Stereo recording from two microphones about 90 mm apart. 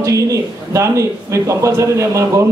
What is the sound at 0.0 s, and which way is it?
A man's voice, 35° right (ahead or behind).